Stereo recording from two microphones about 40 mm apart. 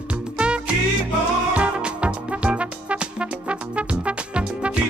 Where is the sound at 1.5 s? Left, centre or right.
Right.